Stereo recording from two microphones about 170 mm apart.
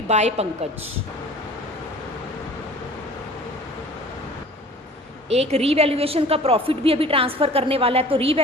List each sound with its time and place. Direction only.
0.1 s a woman's voice: 40° right (ahead or behind)
5.3 s a woman's voice: 40° right (ahead or behind)